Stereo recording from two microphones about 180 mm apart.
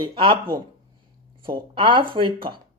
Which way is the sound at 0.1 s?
30° right (ahead or behind).